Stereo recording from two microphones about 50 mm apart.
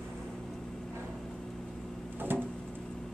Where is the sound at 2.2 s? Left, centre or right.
Right.